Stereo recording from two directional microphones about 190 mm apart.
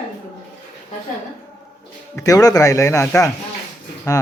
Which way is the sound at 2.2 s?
20° left (ahead or behind).